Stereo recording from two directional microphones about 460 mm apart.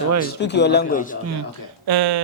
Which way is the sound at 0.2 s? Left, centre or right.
Left.